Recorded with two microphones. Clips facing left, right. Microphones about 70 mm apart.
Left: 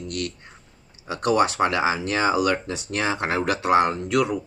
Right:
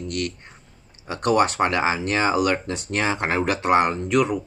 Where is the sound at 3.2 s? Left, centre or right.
Centre.